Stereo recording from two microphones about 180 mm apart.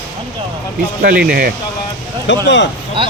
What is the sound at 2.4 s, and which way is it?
Speech, 85° left.